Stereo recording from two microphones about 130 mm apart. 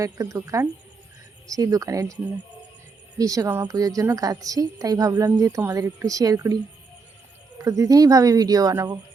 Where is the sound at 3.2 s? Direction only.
25° right (ahead or behind).